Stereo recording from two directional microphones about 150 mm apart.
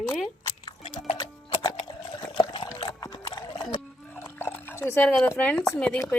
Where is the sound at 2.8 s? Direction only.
25° left (ahead or behind); by 6.0 s 10° left (ahead or behind).